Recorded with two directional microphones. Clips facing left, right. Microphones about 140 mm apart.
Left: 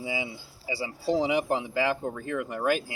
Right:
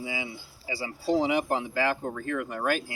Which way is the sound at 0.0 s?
25° left (ahead or behind).